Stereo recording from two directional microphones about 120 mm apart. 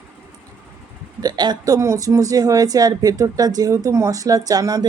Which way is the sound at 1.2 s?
35° right (ahead or behind).